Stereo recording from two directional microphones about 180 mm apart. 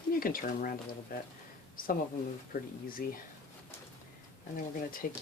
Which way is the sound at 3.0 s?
55° left (ahead or behind).